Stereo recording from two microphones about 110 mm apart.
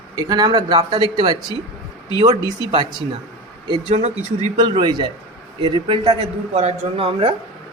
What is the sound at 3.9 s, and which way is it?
Speech, 80° right.